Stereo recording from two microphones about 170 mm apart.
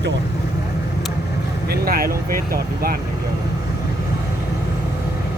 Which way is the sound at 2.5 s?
60° right (ahead or behind).